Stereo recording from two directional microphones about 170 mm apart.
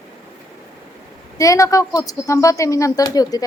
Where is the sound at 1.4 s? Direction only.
20° left (ahead or behind).